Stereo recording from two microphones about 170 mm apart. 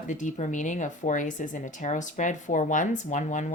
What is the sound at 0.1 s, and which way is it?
Speech, 45° left (ahead or behind).